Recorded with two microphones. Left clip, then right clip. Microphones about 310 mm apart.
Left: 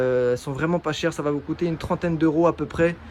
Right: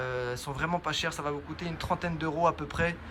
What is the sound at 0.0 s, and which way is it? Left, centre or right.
Speech, centre.